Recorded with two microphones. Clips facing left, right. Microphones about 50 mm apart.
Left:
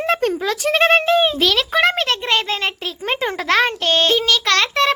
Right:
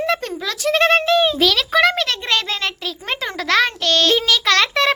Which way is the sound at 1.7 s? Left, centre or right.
Centre.